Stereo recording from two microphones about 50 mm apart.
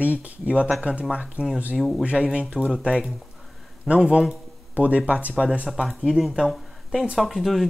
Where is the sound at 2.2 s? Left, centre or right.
Centre.